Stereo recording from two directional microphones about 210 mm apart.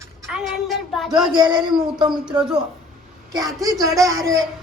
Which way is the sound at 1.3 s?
20° right (ahead or behind).